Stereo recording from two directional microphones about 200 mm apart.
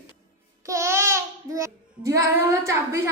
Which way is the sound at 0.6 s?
15° right (ahead or behind).